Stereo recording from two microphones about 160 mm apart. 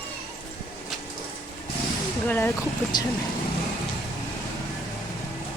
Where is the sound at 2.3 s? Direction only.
10° left (ahead or behind).